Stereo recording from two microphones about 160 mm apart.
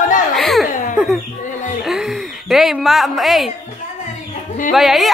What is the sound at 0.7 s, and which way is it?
Cough, 55° left (ahead or behind).